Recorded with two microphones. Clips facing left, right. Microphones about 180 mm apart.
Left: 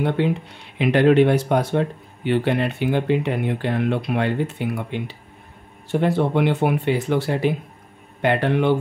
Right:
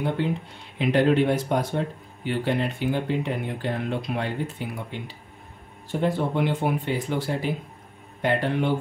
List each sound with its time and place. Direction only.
0.2 s speech: 75° left (ahead or behind)